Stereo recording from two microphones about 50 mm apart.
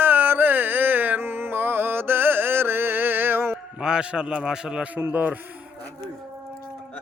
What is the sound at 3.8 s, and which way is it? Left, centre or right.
A man's voice, centre.